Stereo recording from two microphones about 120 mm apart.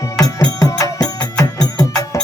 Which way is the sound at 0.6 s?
30° left (ahead or behind).